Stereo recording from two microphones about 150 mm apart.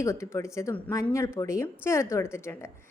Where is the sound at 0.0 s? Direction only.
20° left (ahead or behind).